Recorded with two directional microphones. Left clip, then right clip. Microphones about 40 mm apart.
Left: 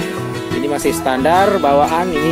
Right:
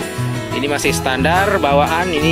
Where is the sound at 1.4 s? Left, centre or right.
Centre.